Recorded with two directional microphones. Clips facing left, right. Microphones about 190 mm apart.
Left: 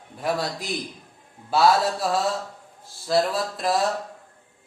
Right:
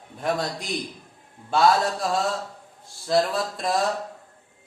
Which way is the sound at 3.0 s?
Centre (ahead or behind).